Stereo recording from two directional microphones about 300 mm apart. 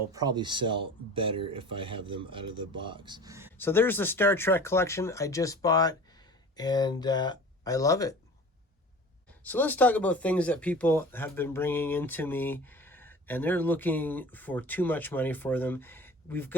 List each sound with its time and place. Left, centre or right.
0.1 s speech: centre
3.6 s speech: centre
9.4 s speech: centre